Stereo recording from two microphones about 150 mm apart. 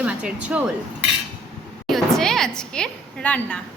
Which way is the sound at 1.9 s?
Centre (ahead or behind).